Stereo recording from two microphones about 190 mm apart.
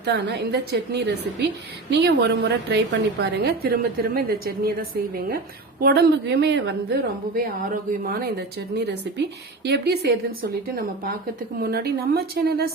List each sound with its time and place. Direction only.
0.0 s a woman's voice: 65° right (ahead or behind)